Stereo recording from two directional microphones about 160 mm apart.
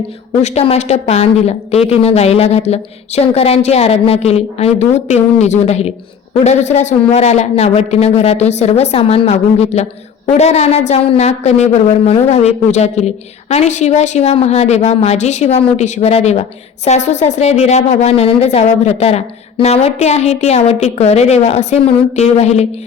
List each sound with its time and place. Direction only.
0.4 s a woman's voice: 40° left (ahead or behind)